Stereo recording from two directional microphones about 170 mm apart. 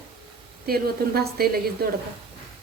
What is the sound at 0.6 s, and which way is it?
Speech, 65° right (ahead or behind).